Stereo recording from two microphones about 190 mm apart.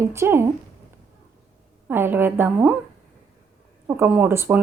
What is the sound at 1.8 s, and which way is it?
Speech, 10° right (ahead or behind).